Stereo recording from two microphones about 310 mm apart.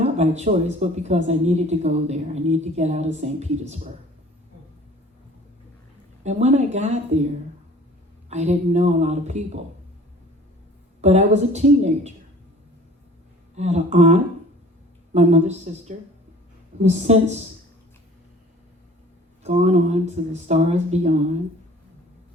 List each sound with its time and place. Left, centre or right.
0.0 s speech: right
6.2 s speech: right
8.3 s speech: right
11.0 s speech: right
13.6 s speech: right
19.4 s speech: right